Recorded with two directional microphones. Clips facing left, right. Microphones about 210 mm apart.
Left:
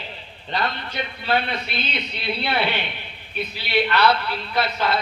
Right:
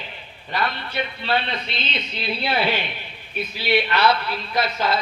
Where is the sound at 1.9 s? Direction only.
60° left (ahead or behind).